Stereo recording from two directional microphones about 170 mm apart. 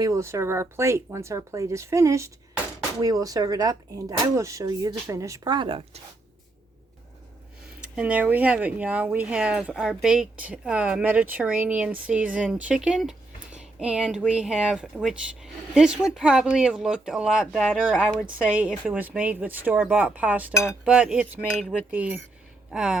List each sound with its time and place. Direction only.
0.0 s speech: 20° right (ahead or behind)
7.9 s speech: 5° right (ahead or behind)